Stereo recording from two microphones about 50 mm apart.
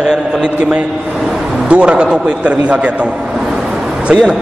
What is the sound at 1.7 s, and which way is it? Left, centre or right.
A man's voice, right.